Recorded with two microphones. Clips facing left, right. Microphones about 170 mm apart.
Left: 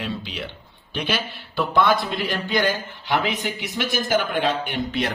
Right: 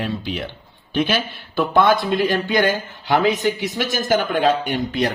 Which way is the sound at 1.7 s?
55° right (ahead or behind).